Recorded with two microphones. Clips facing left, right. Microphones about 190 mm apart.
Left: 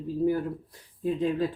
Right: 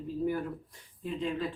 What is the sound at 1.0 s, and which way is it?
Speech, 40° left (ahead or behind).